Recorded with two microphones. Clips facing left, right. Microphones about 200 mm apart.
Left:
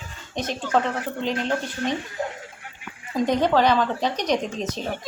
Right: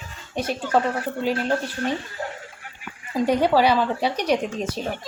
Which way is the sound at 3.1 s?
10° right (ahead or behind).